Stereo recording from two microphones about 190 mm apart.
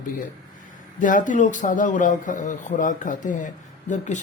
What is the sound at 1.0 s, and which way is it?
A man's voice, 45° left (ahead or behind).